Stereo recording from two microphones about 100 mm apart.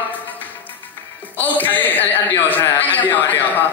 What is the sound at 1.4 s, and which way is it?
A man's voice, 20° left (ahead or behind).